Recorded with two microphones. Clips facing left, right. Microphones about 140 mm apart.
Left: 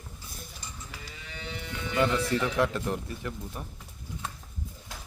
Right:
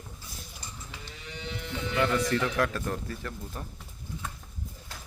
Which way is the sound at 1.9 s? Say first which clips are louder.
Left 1 dB; 20° left (ahead or behind).